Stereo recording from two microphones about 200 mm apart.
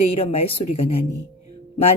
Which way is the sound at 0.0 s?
30° left (ahead or behind).